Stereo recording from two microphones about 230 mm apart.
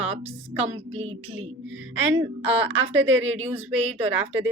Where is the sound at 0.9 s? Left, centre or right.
Right.